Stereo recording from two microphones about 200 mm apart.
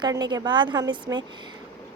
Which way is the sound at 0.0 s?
20° right (ahead or behind).